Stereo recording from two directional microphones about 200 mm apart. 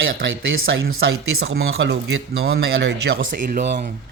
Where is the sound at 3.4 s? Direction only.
40° right (ahead or behind).